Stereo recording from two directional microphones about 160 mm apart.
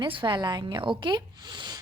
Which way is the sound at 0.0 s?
30° right (ahead or behind).